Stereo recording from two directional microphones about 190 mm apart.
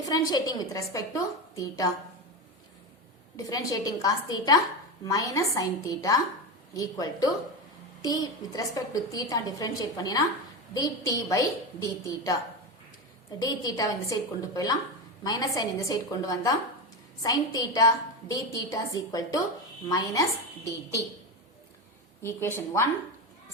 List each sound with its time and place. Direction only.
0.1 s a woman's voice: 20° left (ahead or behind)
3.3 s a woman's voice: 20° left (ahead or behind)
13.4 s a woman's voice: 20° left (ahead or behind)
22.2 s a woman's voice: 15° left (ahead or behind)